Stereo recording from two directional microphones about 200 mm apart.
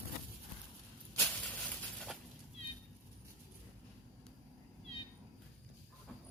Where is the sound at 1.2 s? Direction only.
5° left (ahead or behind).